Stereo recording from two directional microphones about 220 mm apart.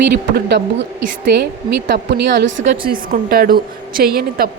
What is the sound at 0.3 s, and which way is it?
A woman's voice, 50° right (ahead or behind).